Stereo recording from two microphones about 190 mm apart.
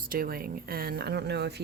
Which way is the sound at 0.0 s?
50° right (ahead or behind).